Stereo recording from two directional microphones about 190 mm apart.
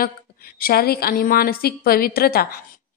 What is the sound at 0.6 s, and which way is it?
A woman's voice, 55° left (ahead or behind).